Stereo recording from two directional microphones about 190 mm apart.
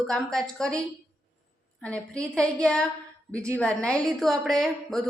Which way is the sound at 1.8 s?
5° left (ahead or behind).